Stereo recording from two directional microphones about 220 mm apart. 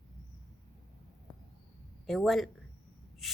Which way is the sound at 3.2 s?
Centre (ahead or behind).